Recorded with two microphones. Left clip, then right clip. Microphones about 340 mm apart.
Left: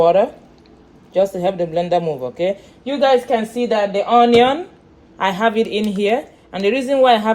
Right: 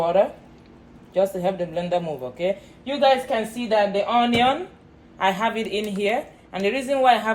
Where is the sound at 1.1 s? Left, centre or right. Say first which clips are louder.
Left 5 dB; left.